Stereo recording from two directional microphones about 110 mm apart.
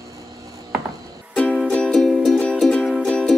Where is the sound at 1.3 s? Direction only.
5° left (ahead or behind).